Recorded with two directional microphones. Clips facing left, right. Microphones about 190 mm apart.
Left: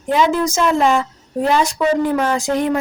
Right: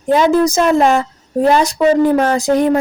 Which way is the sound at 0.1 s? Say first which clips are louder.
Right 5 dB; 40° right (ahead or behind).